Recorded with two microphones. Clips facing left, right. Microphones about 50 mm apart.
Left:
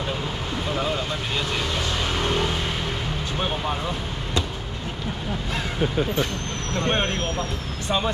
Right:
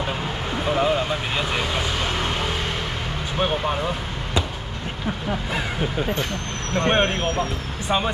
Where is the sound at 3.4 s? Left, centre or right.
Centre.